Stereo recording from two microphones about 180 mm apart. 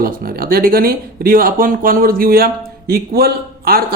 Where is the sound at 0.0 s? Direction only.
55° right (ahead or behind).